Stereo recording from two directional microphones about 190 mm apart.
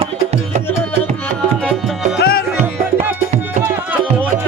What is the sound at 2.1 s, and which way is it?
Music, 55° left (ahead or behind).